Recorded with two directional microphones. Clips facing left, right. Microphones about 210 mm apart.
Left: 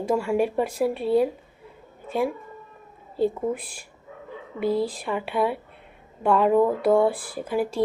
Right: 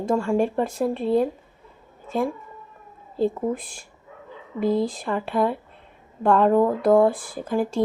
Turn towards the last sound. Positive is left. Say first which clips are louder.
# right 1 dB
turn(degrees=5)  # may be behind; listen again after turning